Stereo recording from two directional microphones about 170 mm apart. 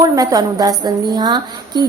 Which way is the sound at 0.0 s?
20° right (ahead or behind).